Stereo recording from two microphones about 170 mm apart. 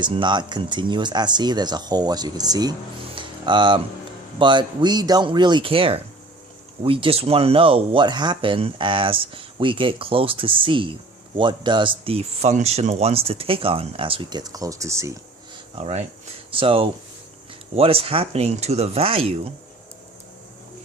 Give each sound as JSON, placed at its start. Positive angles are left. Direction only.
{"t": 0.0, "sound": "speech", "side_deg": -30}
{"t": 3.2, "sound": "a sound", "side_deg": -30}
{"t": 4.4, "sound": "speech", "side_deg": -25}
{"t": 15.8, "sound": "speech", "side_deg": -40}